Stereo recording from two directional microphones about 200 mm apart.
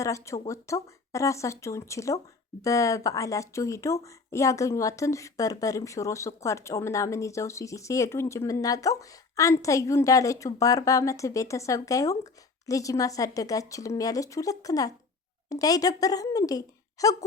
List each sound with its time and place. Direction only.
0.0 s speech: 15° left (ahead or behind)